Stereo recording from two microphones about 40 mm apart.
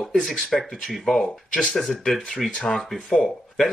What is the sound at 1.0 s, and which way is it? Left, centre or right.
Speech, centre.